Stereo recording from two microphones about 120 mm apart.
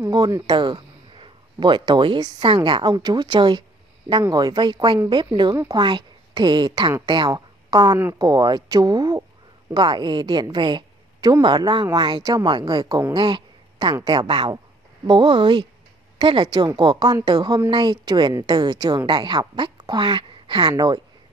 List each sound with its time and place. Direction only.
0.0 s a woman's voice: 30° right (ahead or behind)
13.1 s a sound: 40° right (ahead or behind)
13.9 s a woman's voice: 40° right (ahead or behind)